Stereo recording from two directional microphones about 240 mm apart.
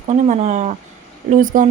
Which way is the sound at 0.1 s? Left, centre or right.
Right.